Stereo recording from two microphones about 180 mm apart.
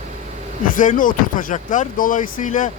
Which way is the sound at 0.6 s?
50° left (ahead or behind).